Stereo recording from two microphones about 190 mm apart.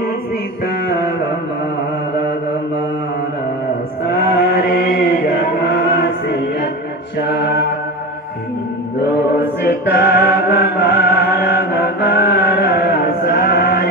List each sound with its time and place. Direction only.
4.4 s chant: 50° left (ahead or behind)
5.9 s choir: 60° left (ahead or behind)
7.2 s mantra: 55° left (ahead or behind)
9.9 s chant: 55° left (ahead or behind)